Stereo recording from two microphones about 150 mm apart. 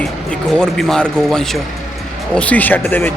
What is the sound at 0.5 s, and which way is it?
Speech, 5° left (ahead or behind).